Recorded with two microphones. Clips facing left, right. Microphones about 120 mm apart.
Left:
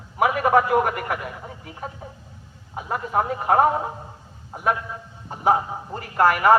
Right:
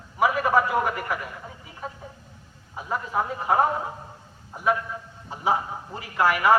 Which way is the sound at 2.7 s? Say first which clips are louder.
Left 3 dB; 60° left (ahead or behind).